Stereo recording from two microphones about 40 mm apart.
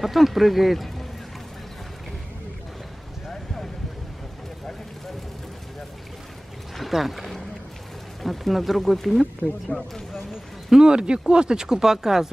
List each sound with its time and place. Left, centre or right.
0.0 s speech: centre
6.8 s a sound: centre
8.2 s speech: centre
9.7 s speech: centre
10.7 s speech: centre